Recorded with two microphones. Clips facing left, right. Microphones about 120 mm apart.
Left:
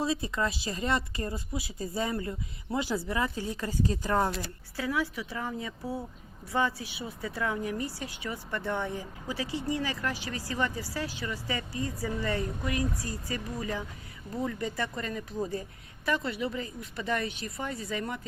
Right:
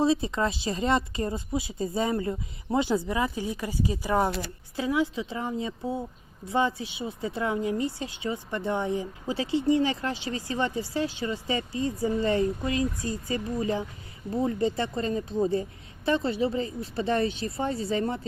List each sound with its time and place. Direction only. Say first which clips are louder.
0.0 s a woman's voice: right 5 dB; 25° right (ahead or behind)